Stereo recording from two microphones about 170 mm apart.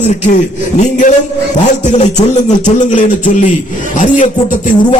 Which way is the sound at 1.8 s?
45° left (ahead or behind).